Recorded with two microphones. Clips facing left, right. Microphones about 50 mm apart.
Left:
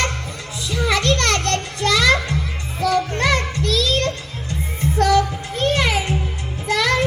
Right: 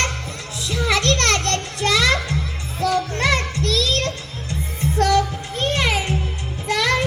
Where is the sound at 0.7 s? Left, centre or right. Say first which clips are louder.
Left 1 dB; centre.